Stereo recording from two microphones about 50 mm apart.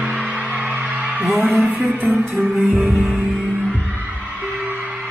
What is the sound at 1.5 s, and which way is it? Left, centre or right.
Music, right.